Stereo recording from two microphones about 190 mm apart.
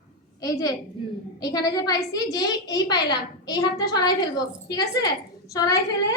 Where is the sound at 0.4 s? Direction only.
20° left (ahead or behind).